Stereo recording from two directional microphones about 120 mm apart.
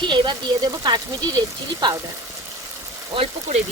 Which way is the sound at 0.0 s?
40° right (ahead or behind).